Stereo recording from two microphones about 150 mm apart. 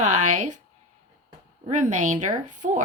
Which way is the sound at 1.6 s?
55° right (ahead or behind).